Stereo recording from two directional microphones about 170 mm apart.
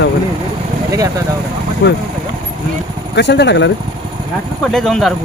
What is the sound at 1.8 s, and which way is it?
Speech, 90° left.